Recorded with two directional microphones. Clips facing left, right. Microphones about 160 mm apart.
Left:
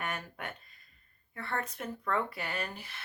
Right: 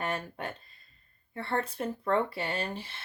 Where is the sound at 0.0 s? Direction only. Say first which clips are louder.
Right 5 dB; 30° right (ahead or behind).